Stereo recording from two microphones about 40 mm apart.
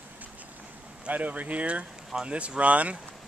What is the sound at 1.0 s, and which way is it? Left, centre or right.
Speech, right.